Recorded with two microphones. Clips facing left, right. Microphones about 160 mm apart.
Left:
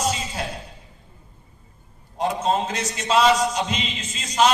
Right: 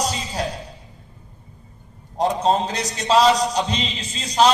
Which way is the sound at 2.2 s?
35° right (ahead or behind).